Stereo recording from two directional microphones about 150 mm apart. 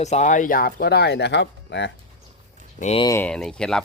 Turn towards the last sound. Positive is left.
turn(degrees=5)  # may be behind; listen again after turning